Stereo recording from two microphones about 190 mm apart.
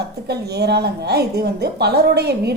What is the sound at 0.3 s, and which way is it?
A woman's voice, 60° right (ahead or behind).